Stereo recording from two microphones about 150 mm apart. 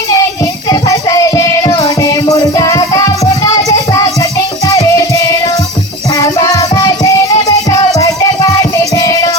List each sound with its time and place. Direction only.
0.7 s music: 20° left (ahead or behind)
8.8 s music: 20° left (ahead or behind)